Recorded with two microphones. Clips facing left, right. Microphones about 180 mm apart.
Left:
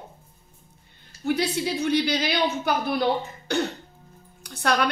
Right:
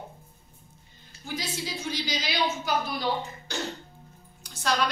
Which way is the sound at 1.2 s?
65° left (ahead or behind).